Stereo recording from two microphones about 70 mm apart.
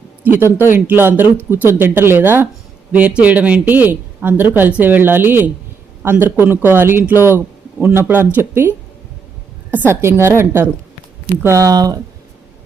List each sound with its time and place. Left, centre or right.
0.2 s a sound: right
0.4 s speech: left
0.9 s speech: right
2.9 s speech: centre; by 8.7 s right
9.9 s speech: right
11.4 s speech: right